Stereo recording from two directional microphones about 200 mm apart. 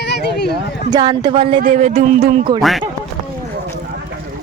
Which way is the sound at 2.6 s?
Centre (ahead or behind).